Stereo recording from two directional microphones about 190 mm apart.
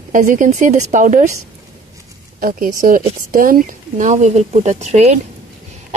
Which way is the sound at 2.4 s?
45° right (ahead or behind).